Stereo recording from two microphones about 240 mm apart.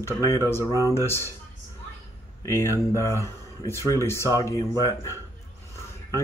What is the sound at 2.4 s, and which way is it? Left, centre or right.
Speech, centre.